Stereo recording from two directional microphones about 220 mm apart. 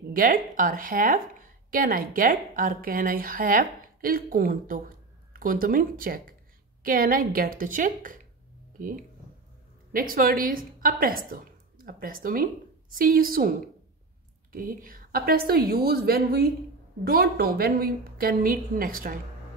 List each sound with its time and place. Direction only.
0.1 s a woman's voice: 40° right (ahead or behind)